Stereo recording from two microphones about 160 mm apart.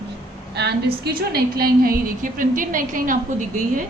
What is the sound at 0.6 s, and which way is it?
A woman's voice, 90° right.